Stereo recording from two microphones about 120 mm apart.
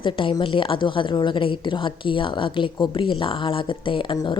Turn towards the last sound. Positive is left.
turn(degrees=40)  # may be behind; listen again after turning